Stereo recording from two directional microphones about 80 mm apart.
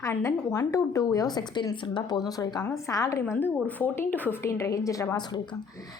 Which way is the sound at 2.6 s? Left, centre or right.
Left.